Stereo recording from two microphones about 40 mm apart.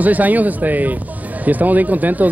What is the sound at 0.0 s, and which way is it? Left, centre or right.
A man's voice, right.